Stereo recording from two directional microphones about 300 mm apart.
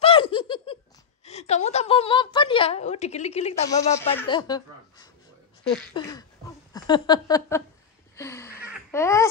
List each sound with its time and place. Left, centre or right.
0.0 s laughter: centre
1.2 s a woman's voice: left
3.9 s a woman's voice: centre
8.2 s a sound: centre
8.9 s a woman's voice: centre